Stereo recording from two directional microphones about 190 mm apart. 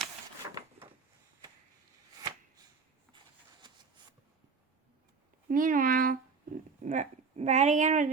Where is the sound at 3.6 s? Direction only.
25° right (ahead or behind).